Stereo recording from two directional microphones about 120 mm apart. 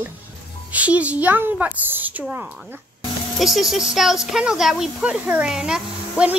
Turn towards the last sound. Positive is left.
turn(degrees=-5)  # may be behind; listen again after turning